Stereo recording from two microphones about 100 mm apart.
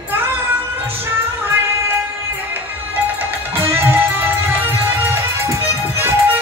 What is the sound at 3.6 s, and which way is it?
Music, 25° right (ahead or behind).